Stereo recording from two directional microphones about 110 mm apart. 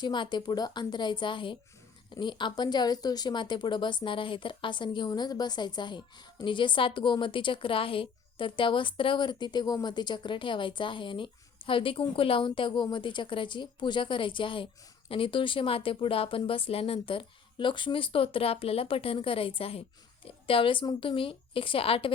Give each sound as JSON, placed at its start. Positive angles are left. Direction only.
{"t": 0.0, "sound": "speech", "side_deg": 45}